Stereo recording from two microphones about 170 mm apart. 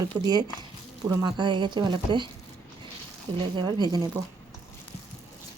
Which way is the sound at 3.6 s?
25° right (ahead or behind).